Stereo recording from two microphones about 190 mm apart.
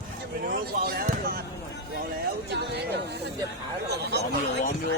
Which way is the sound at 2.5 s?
60° right (ahead or behind).